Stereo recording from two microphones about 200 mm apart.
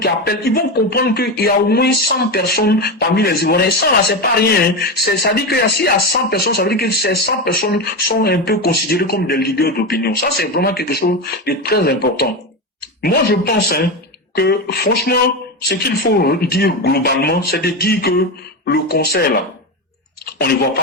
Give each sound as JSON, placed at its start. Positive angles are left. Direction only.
{"t": 0.0, "sound": "speech", "side_deg": 50}